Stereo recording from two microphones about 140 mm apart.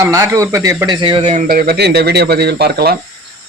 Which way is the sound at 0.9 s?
35° right (ahead or behind).